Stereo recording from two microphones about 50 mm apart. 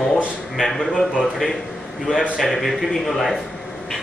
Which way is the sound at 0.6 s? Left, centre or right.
Centre.